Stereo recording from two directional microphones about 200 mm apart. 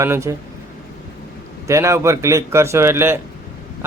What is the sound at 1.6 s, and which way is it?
Speech, 15° right (ahead or behind).